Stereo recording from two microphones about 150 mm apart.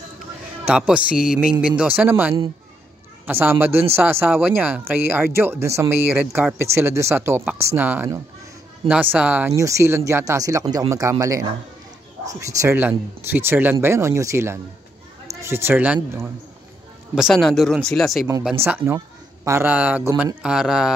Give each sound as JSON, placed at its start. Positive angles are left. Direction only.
{"t": 0.7, "sound": "a man's voice", "side_deg": -5}
{"t": 17.1, "sound": "speech", "side_deg": 0}
{"t": 18.4, "sound": "speech", "side_deg": -10}